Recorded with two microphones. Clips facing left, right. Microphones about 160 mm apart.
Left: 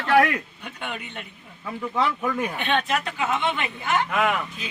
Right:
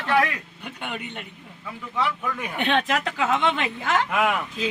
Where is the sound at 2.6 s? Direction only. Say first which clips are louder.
Right 6 dB; 85° right.